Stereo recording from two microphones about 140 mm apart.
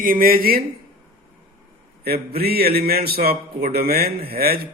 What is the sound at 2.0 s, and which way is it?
A man's voice, 90° right.